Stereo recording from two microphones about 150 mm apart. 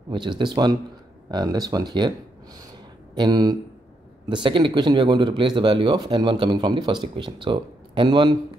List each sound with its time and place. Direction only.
0.1 s speech: 30° right (ahead or behind)
3.2 s speech: 25° right (ahead or behind)